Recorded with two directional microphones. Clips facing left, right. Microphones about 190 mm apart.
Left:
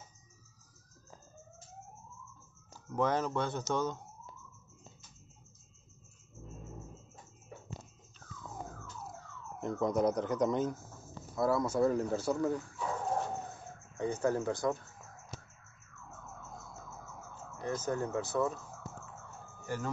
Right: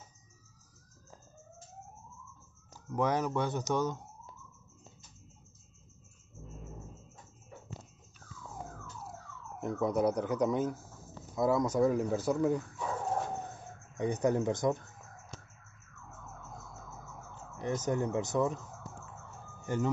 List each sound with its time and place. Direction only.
2.7 s speech: 15° right (ahead or behind)
9.6 s speech: 10° right (ahead or behind)
13.9 s speech: 15° right (ahead or behind)
15.3 s a sound: 5° left (ahead or behind)
17.6 s speech: 20° right (ahead or behind)
19.6 s speech: 20° right (ahead or behind)